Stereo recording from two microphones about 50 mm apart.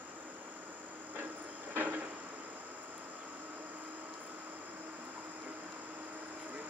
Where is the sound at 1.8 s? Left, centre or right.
Right.